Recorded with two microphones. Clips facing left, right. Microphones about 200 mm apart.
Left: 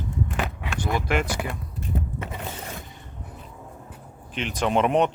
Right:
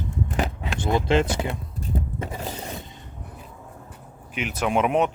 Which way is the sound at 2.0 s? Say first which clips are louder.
Right 2 dB; 35° right (ahead or behind).